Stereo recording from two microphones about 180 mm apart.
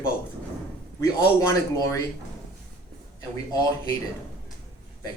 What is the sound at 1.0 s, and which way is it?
Speech, 20° left (ahead or behind).